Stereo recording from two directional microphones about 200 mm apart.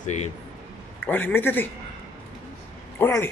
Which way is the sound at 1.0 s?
10° left (ahead or behind).